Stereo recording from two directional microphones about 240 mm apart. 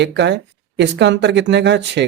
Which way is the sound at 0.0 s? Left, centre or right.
Right.